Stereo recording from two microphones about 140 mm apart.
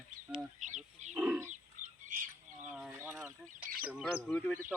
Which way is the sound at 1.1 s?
20° right (ahead or behind).